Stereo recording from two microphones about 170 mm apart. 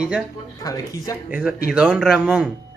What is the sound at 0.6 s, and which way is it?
Speech, 20° left (ahead or behind).